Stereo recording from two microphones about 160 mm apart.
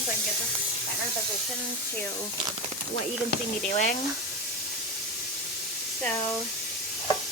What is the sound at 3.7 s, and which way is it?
Speech, 50° left (ahead or behind).